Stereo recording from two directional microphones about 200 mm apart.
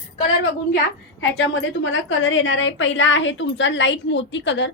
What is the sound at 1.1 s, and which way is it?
A woman's voice, 70° left (ahead or behind).